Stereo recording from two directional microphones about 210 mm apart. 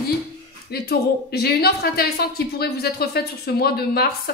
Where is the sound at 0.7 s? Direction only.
50° left (ahead or behind).